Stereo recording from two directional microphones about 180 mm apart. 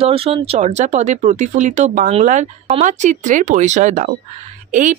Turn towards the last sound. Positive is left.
turn(degrees=-45)  # may be behind; listen again after turning